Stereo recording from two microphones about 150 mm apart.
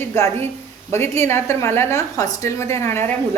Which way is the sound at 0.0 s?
15° left (ahead or behind).